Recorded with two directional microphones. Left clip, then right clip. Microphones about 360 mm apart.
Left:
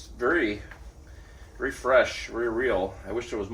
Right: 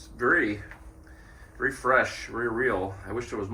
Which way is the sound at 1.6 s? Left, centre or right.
Centre.